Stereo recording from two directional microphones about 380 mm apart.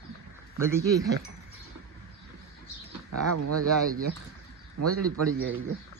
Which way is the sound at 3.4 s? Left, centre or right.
Right.